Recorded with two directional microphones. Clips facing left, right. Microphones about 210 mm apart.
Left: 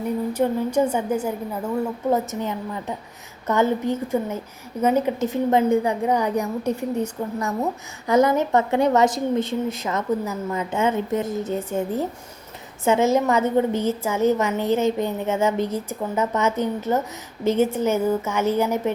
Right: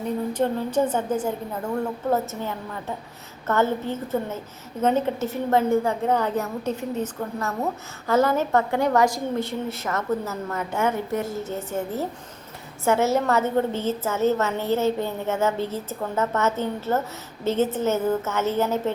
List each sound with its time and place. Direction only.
0.3 s a woman's voice: 10° left (ahead or behind)